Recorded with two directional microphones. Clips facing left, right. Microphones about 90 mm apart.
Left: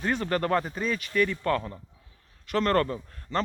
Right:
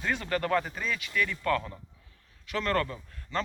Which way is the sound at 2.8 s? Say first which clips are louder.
Left 6 dB; 35° left (ahead or behind).